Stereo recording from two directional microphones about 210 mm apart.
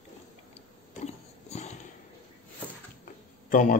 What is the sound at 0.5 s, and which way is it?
Sniff, 30° left (ahead or behind).